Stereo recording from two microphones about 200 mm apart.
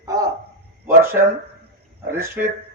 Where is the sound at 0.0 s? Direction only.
15° right (ahead or behind).